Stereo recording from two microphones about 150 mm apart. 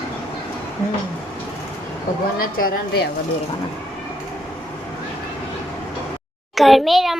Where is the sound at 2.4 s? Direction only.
70° left (ahead or behind).